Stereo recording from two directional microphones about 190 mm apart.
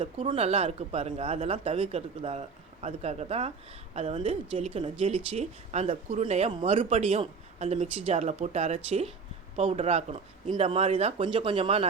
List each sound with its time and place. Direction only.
0.3 s speech: 30° right (ahead or behind)